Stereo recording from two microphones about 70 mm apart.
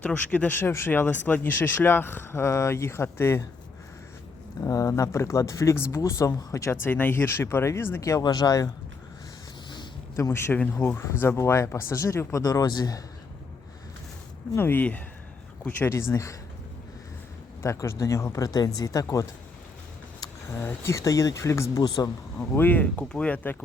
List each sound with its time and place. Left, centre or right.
0.0 s speech: left
4.6 s speech: left
6.7 s speech: left
8.2 s speech: left
10.2 s speech: left
10.5 s speech: left
11.0 s speech: left
14.5 s speech: left
15.8 s speech: left
17.6 s speech: left
20.5 s speech: left
20.9 s speech: left
21.8 s speech: left
22.4 s speech: left